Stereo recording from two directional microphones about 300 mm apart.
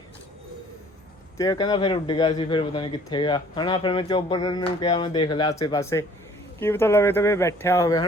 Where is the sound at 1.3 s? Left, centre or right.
Centre.